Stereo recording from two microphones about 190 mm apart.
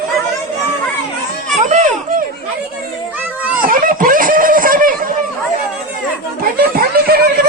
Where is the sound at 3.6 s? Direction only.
45° right (ahead or behind).